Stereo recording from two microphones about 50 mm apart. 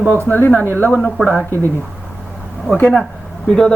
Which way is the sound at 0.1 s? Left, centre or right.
Left.